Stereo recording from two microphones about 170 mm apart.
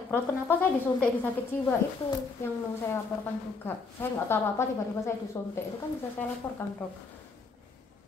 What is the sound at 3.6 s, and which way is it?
Speech, 15° left (ahead or behind).